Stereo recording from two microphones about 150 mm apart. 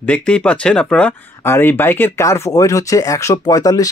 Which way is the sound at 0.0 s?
10° left (ahead or behind).